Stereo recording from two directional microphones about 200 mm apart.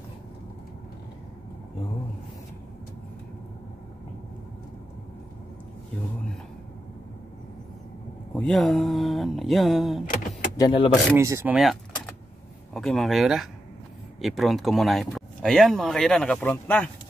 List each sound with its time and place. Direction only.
8.4 s speech: centre (ahead or behind)
10.6 s speech: 25° left (ahead or behind)
11.1 s speech: 15° right (ahead or behind)
11.5 s speech: centre (ahead or behind)